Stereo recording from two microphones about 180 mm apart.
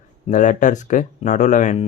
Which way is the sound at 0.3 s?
45° left (ahead or behind).